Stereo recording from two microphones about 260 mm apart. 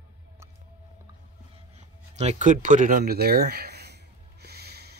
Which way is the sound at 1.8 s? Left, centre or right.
Right.